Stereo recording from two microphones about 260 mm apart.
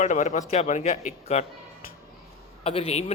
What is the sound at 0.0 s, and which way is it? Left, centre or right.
Speech, left.